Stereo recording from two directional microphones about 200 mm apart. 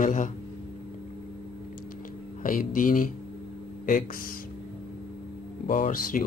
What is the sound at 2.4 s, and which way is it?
Speech, 45° left (ahead or behind).